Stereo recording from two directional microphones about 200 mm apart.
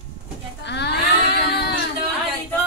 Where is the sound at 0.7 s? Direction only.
55° left (ahead or behind).